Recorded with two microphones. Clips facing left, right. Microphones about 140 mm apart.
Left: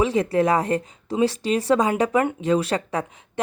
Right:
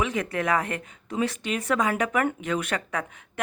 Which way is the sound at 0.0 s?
30° left (ahead or behind).